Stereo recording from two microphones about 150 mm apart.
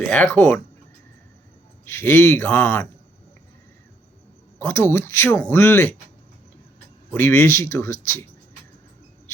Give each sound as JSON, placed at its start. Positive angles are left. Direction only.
{"t": 0.0, "sound": "speech", "side_deg": 10}
{"t": 1.8, "sound": "speech", "side_deg": 15}
{"t": 4.6, "sound": "speech", "side_deg": 15}
{"t": 7.1, "sound": "speech", "side_deg": 15}